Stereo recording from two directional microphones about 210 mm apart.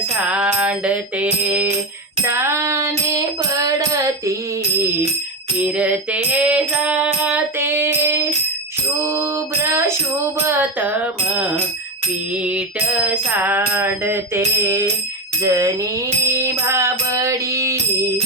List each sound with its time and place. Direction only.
0.2 s music: 5° right (ahead or behind)
5.5 s music: 5° right (ahead or behind)
9.0 s a sound: 15° right (ahead or behind)
9.7 s music: 10° right (ahead or behind)